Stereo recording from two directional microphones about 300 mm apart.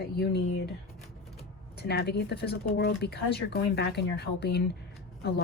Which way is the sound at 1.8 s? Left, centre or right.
Left.